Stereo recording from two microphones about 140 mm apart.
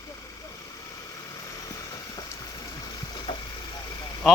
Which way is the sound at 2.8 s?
30° left (ahead or behind).